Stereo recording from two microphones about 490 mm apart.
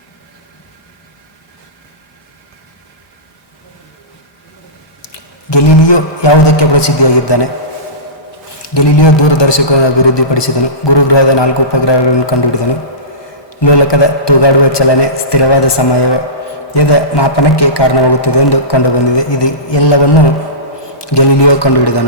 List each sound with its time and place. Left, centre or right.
5.1 s a man's voice: left
8.7 s a man's voice: left
13.5 s a man's voice: left